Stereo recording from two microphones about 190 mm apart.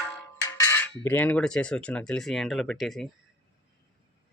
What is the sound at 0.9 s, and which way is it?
Speech, 10° left (ahead or behind).